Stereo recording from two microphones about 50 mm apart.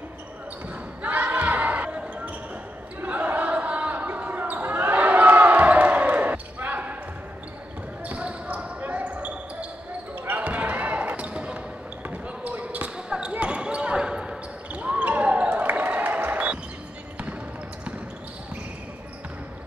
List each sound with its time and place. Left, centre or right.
1.0 s basketball bounce: right
3.0 s basketball bounce: right
8.0 s basketball bounce: right
10.2 s basketball bounce: right
10.5 s basketball bounce: right
12.9 s basketball bounce: centre
13.3 s a sound: right
14.7 s basketball bounce: right
15.9 s a sound: right